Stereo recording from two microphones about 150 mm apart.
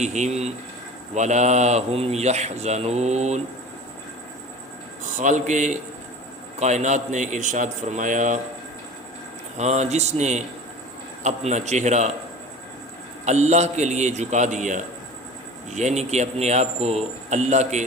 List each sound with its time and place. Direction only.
0.0 s a man's voice: 50° right (ahead or behind)
5.1 s a man's voice: 55° right (ahead or behind)
9.6 s a man's voice: 50° right (ahead or behind)
13.2 s a man's voice: 50° right (ahead or behind)